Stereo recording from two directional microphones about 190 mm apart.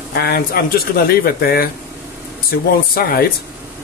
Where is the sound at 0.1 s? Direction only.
55° left (ahead or behind).